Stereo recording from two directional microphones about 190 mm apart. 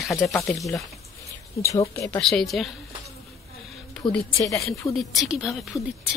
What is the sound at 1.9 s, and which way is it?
Speech, 15° left (ahead or behind).